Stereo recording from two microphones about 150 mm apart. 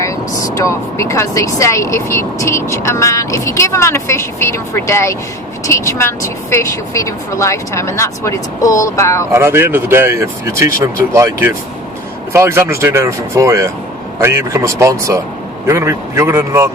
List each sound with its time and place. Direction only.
0.0 s speech: 20° left (ahead or behind)
9.3 s speech: 15° right (ahead or behind)
12.3 s speech: 15° right (ahead or behind)